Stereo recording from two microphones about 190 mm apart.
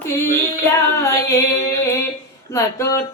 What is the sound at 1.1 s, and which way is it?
Female singing, 15° left (ahead or behind).